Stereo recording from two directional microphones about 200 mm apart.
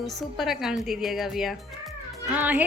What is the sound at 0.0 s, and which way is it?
A woman's voice, centre (ahead or behind).